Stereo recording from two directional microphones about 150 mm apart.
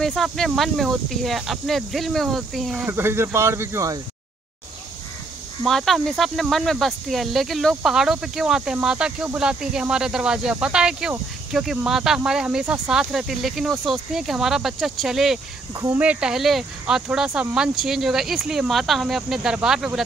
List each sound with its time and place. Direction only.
0.0 s speech: centre (ahead or behind)
2.9 s speech: 15° right (ahead or behind)
5.6 s speech: centre (ahead or behind)